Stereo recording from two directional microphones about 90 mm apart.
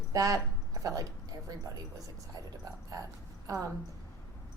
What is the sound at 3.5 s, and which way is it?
Speech, 40° right (ahead or behind).